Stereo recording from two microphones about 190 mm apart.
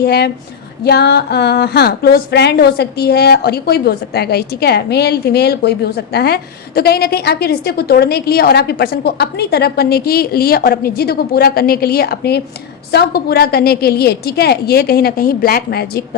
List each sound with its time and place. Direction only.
0.0 s a woman's voice: 55° left (ahead or behind)